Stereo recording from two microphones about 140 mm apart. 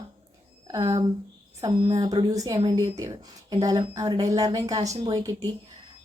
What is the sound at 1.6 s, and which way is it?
A woman's voice, 35° right (ahead or behind).